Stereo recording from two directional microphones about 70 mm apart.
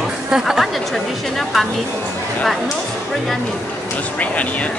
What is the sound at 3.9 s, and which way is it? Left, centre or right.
Speech, left.